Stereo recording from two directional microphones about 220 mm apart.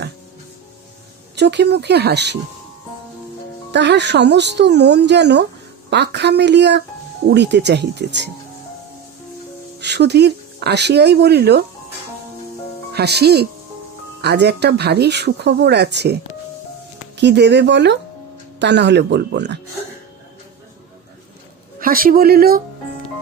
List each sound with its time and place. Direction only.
1.4 s speech: 50° right (ahead or behind)
3.7 s speech: 50° right (ahead or behind)
9.8 s speech: 50° right (ahead or behind)
12.9 s speech: 45° right (ahead or behind)
17.2 s speech: 50° right (ahead or behind)
21.8 s speech: 40° right (ahead or behind)